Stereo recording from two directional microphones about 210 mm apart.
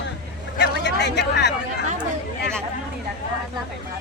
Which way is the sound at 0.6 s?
55° left (ahead or behind).